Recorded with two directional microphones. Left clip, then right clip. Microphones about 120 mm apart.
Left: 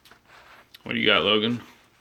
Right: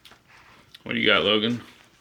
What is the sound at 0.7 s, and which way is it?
Speech, 15° left (ahead or behind).